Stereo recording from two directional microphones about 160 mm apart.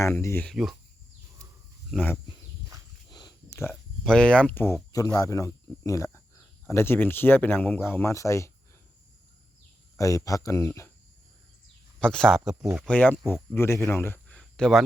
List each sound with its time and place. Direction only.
0.0 s speech: 15° left (ahead or behind)
0.4 s speech: centre (ahead or behind)
3.1 s a sound: 25° left (ahead or behind)
3.7 s speech: 5° left (ahead or behind)
10.0 s speech: 20° left (ahead or behind)
11.9 s speech: 5° left (ahead or behind)